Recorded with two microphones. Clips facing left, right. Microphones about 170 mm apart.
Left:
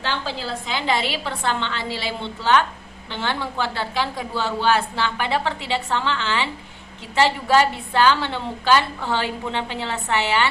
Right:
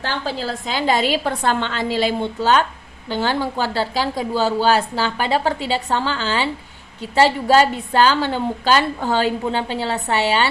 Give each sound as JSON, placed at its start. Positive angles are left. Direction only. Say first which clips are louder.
{"t": 0.0, "sound": "a woman's voice", "louder": "right 3 dB", "side_deg": -45}
{"t": 7.9, "sound": "speech", "louder": "right 2 dB", "side_deg": -40}